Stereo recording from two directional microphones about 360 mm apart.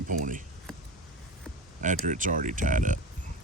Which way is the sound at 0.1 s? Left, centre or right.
Right.